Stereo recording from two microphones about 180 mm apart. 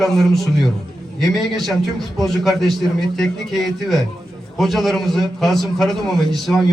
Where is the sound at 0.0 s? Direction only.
Centre (ahead or behind).